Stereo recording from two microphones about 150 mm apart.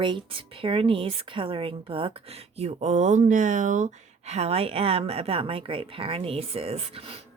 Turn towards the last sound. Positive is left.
turn(degrees=-40)  # may be behind; listen again after turning